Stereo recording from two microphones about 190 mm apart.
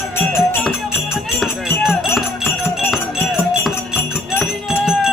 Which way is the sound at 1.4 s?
Centre (ahead or behind).